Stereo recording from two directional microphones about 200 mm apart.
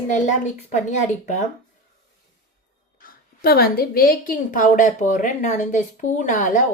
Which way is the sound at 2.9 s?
45° left (ahead or behind).